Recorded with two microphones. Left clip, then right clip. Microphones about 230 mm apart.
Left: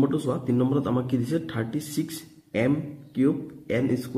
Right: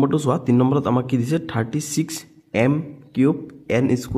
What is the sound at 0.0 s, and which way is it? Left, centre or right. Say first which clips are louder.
Speech: right 6 dB; right.